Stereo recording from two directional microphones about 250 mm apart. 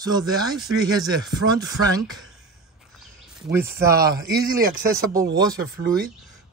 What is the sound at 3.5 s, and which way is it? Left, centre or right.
Speech, centre.